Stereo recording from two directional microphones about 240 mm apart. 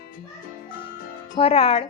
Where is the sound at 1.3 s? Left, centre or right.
Left.